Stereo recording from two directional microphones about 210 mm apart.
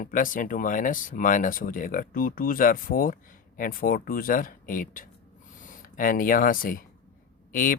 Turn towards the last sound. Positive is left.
turn(degrees=40)  # may be behind; listen again after turning